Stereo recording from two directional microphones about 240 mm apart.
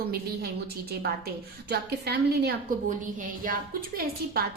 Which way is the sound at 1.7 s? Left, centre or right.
Right.